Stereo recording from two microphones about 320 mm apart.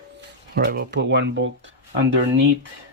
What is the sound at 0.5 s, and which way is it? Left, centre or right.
Speech, right.